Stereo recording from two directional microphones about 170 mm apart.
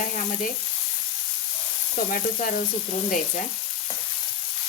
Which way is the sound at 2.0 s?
50° left (ahead or behind).